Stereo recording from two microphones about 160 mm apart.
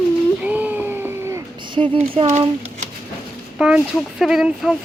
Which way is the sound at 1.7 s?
35° right (ahead or behind).